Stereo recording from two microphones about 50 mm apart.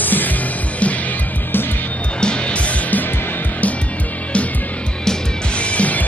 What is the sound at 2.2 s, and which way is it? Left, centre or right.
Music, centre.